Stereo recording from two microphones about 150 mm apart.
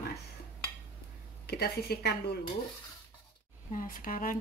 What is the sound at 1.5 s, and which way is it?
Speech, 90° left.